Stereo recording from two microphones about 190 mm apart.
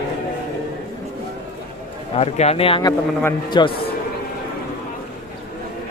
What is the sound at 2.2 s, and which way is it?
A man's voice, 35° left (ahead or behind).